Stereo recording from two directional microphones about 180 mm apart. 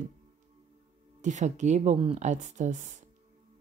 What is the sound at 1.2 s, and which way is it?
Speech, 40° right (ahead or behind).